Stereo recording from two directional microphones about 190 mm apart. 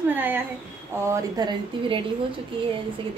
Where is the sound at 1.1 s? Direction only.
20° right (ahead or behind).